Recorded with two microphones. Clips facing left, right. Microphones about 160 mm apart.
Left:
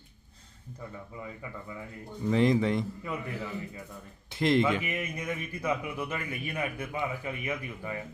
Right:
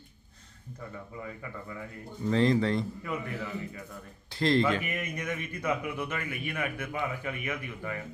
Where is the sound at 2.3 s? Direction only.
15° left (ahead or behind).